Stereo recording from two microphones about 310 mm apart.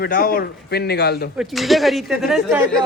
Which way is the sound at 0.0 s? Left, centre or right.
Left.